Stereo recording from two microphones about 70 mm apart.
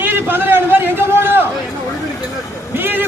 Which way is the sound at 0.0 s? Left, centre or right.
Right.